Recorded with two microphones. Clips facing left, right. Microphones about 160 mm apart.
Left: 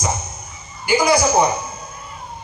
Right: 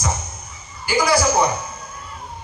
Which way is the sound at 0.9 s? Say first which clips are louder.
Left 2 dB; 20° left (ahead or behind).